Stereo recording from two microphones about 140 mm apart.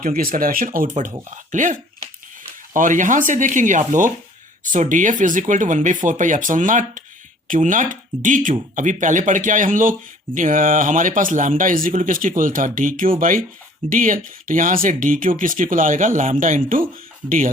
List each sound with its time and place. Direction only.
0.0 s speech: 85° right
1.5 s speech: 65° right (ahead or behind)
2.7 s speech: 65° right (ahead or behind)